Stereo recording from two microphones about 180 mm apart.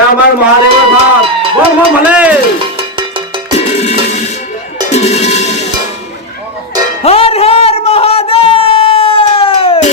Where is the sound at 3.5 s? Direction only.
35° left (ahead or behind).